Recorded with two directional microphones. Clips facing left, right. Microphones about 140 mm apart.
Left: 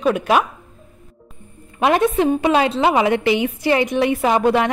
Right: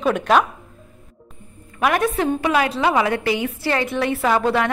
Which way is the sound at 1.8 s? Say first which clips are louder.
Left 3 dB; 25° left (ahead or behind).